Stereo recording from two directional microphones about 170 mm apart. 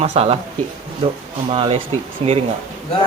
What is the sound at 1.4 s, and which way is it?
Speech, 35° right (ahead or behind).